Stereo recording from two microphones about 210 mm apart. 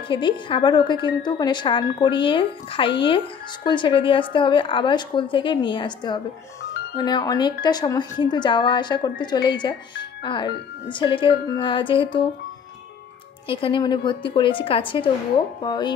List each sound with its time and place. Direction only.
0.1 s a woman's voice: 25° left (ahead or behind)
13.5 s a woman's voice: 25° left (ahead or behind)